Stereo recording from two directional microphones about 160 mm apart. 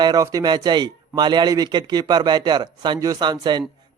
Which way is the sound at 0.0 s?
25° right (ahead or behind).